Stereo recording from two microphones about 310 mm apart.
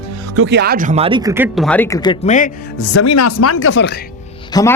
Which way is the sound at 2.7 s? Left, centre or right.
Left.